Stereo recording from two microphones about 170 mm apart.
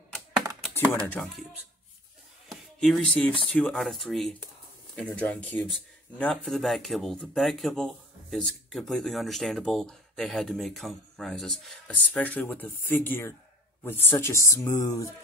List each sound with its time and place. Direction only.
2.5 s speech: centre (ahead or behind); by 15.0 s 20° left (ahead or behind)